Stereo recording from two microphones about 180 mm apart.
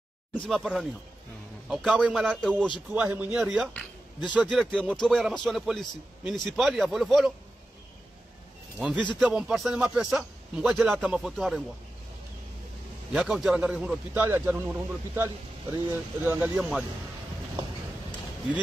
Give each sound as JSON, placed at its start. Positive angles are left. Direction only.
{"t": 0.3, "sound": "a man's voice", "side_deg": -5}
{"t": 8.7, "sound": "a man's voice", "side_deg": -5}
{"t": 13.1, "sound": "a man's voice", "side_deg": -5}